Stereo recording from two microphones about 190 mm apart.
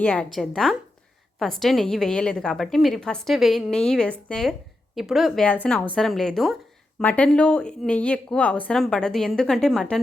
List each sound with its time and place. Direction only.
0.0 s a woman's voice: 5° left (ahead or behind)